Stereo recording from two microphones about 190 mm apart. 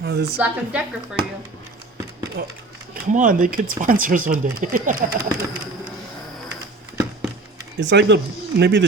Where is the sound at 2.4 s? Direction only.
50° right (ahead or behind).